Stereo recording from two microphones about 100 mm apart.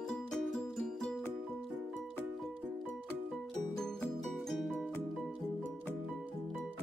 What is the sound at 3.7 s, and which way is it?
Music, 5° left (ahead or behind).